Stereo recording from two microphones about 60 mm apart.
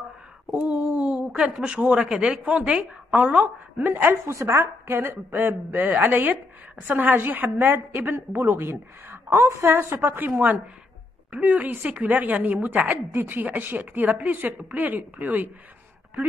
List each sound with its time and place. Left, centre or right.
0.5 s a sound: right
0.8 s a woman's voice: right
3.9 s a woman's voice: right
4.3 s a woman's voice: right
4.9 s a woman's voice: right